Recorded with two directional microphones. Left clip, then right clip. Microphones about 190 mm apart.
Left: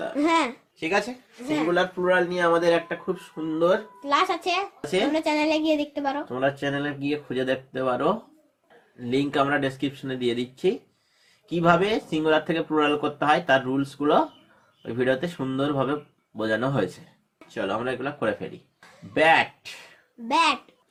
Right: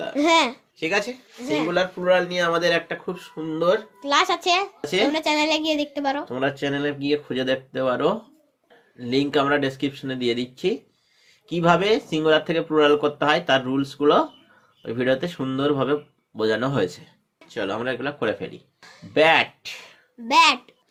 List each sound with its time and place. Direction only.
0.1 s a child's voice: 25° right (ahead or behind)
1.5 s speech: 40° right (ahead or behind)